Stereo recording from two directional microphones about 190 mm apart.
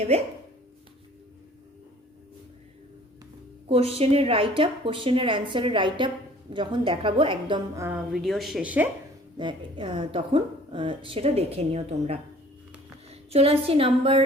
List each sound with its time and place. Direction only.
0.1 s speech: 35° right (ahead or behind)
3.7 s speech: 30° right (ahead or behind)
7.9 s speech: 5° right (ahead or behind)
9.4 s a woman's voice: 25° right (ahead or behind)